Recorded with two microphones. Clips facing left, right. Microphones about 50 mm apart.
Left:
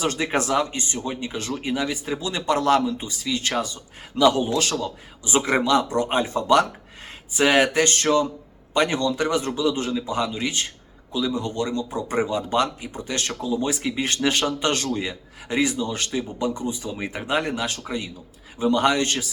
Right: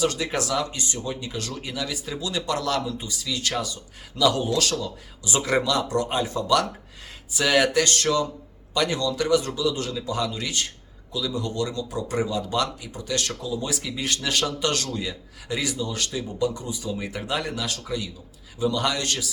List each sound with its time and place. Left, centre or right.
0.0 s speech: left